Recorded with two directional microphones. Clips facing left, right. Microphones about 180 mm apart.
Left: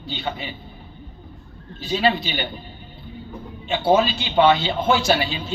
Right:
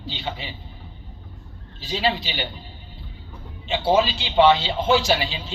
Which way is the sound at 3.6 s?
50° left (ahead or behind).